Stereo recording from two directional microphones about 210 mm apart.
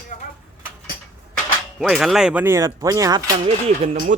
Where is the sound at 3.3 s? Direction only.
30° right (ahead or behind).